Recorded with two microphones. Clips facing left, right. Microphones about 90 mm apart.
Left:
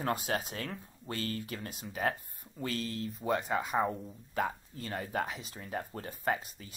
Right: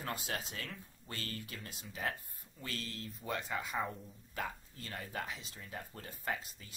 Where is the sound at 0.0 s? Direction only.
45° left (ahead or behind).